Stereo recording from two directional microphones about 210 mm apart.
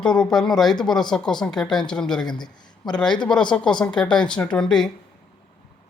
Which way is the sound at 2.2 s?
20° left (ahead or behind).